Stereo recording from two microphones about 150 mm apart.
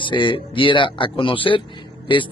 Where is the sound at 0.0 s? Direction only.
30° left (ahead or behind).